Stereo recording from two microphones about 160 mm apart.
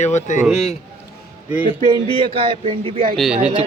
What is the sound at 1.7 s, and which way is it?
Speech, 30° left (ahead or behind).